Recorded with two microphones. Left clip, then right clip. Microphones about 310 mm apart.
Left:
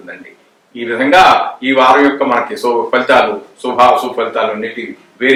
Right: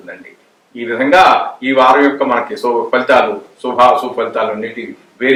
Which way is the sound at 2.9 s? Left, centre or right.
Centre.